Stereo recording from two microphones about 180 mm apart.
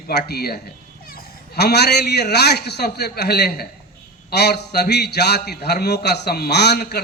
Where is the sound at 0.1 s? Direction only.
60° left (ahead or behind).